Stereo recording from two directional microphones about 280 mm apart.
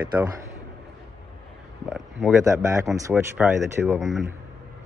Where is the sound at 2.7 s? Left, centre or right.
Centre.